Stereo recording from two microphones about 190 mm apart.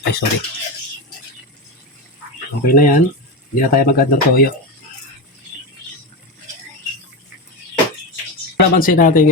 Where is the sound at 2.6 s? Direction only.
50° left (ahead or behind).